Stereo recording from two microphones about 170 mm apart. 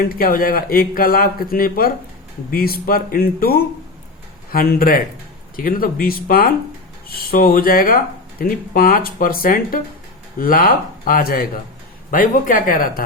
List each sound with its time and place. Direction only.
0.1 s a man's voice: 60° left (ahead or behind)